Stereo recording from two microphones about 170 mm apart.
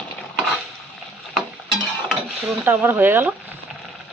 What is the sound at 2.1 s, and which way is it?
Stir, 5° right (ahead or behind).